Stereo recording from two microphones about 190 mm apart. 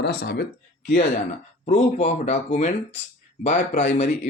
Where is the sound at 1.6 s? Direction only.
35° left (ahead or behind).